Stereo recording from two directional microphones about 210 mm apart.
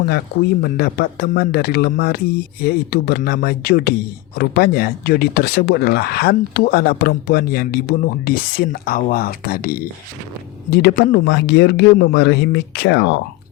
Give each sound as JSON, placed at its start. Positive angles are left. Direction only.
{"t": 0.6, "sound": "speech", "side_deg": 45}